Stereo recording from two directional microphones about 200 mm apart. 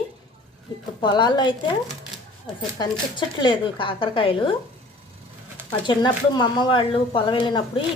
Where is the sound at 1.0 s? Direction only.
20° left (ahead or behind).